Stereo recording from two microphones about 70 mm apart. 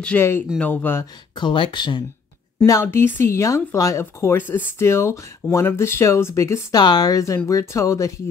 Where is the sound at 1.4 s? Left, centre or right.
Left.